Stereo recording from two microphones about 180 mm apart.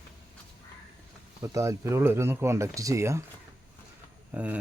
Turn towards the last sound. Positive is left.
turn(degrees=-10)  # may be behind; listen again after turning